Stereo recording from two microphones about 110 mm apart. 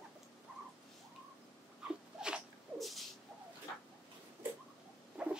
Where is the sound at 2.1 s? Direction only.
5° right (ahead or behind).